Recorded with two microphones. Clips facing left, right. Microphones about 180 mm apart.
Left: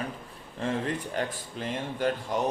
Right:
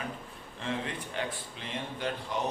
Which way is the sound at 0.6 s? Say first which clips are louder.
Left 5 dB; 45° left (ahead or behind).